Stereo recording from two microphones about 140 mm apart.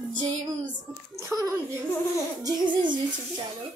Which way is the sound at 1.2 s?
20° right (ahead or behind).